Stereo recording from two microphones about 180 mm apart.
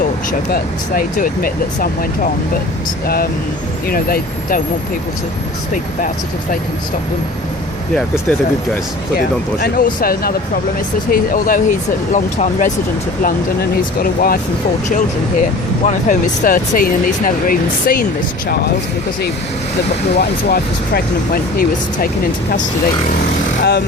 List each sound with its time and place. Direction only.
0.3 s speech: 50° left (ahead or behind)
3.8 s speech: 55° left (ahead or behind)
9.1 s speech: 60° left (ahead or behind)
20.1 s speech: 60° left (ahead or behind)